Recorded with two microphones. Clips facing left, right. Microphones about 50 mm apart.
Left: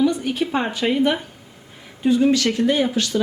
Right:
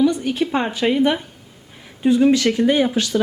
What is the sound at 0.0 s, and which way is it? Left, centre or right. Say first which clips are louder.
A woman's voice: right 2 dB; centre.